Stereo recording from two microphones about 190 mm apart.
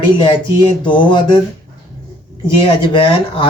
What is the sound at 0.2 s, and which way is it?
Speech, 25° left (ahead or behind).